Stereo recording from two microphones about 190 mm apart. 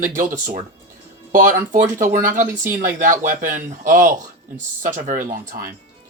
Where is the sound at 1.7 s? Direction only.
45° right (ahead or behind).